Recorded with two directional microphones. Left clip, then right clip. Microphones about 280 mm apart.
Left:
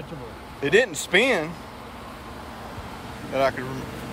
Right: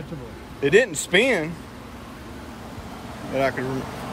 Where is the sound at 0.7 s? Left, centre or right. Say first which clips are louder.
Right 1 dB; left.